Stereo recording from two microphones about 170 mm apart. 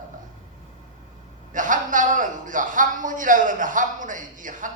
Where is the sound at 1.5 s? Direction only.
50° right (ahead or behind).